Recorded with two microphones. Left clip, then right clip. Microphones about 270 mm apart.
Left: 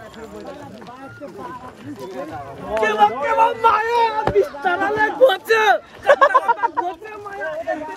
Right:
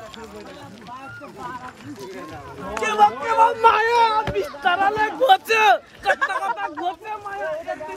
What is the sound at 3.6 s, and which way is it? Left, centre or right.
Speech, right.